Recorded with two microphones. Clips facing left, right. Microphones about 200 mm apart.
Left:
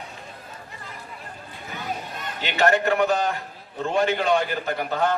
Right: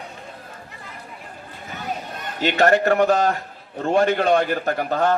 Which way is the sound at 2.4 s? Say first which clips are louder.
Right 4 dB; 50° right (ahead or behind).